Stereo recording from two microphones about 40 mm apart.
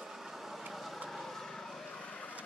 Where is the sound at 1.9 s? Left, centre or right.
Left.